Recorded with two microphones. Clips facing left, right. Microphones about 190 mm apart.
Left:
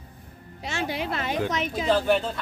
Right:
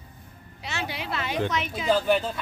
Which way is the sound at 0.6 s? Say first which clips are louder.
Left 4 dB; 45° left (ahead or behind).